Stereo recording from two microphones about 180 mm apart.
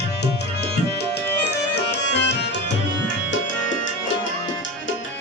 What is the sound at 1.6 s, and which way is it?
Music, 70° left (ahead or behind).